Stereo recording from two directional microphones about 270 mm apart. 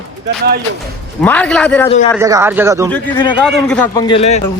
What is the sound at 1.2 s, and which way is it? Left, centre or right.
Speech, centre.